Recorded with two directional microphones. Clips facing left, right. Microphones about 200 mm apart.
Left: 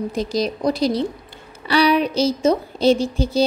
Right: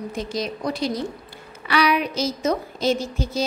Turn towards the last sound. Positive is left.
turn(degrees=30)  # may be behind; listen again after turning